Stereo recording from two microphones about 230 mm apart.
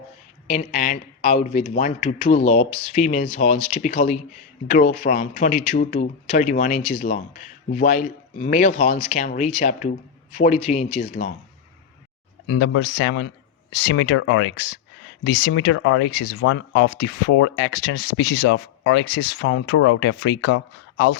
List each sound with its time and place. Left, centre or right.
0.4 s speech: left
12.5 s speech: left